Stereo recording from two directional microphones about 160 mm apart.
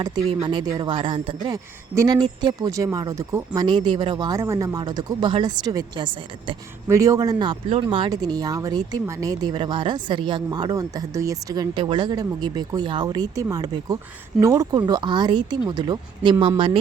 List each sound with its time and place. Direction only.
0.3 s speech: 30° right (ahead or behind)